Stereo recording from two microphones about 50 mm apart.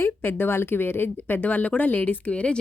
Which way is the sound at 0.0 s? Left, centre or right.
Left.